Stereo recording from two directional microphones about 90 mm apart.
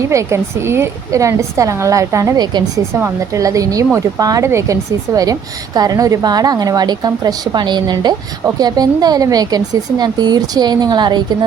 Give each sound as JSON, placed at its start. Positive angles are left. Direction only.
{"t": 0.1, "sound": "a woman's voice", "side_deg": -35}
{"t": 3.3, "sound": "a woman's voice", "side_deg": -40}